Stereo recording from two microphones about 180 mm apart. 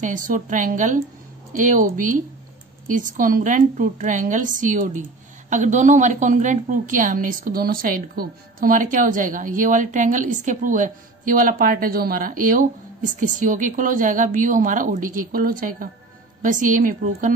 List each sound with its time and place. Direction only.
0.0 s a woman's voice: 45° right (ahead or behind)